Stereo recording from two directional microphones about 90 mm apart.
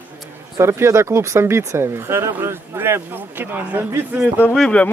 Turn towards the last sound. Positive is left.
turn(degrees=0)  # may be behind; listen again after turning